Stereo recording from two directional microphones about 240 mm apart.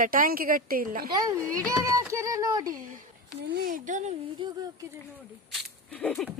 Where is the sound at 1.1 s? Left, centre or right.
Centre.